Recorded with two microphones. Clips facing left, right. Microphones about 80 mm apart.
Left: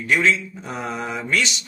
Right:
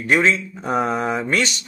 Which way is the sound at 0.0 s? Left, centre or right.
Right.